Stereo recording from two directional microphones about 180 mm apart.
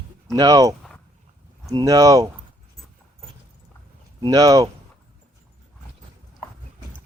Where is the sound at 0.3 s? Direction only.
20° right (ahead or behind).